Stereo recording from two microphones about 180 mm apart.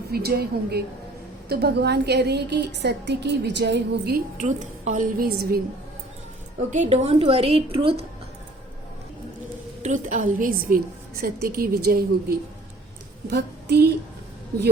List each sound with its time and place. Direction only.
0.1 s a woman's voice: 60° right (ahead or behind)
4.4 s a woman's voice: 40° right (ahead or behind)
6.6 s a woman's voice: 40° right (ahead or behind)
9.8 s a woman's voice: 45° right (ahead or behind)
13.2 s a woman's voice: 65° right (ahead or behind)